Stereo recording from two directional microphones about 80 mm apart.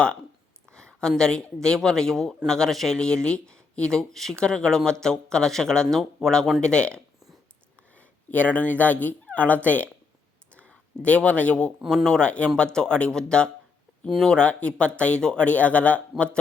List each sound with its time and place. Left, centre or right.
0.7 s speech: centre